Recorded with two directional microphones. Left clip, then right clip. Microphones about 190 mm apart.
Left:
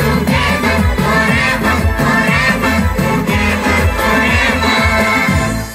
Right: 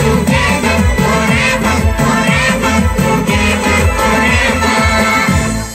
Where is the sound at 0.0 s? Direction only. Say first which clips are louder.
Right 2 dB; 40° right (ahead or behind).